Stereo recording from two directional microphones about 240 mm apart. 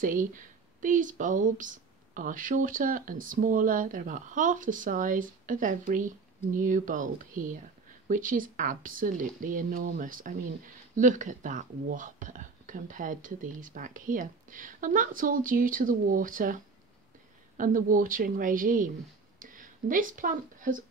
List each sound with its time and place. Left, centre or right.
0.0 s speech: right
17.6 s speech: right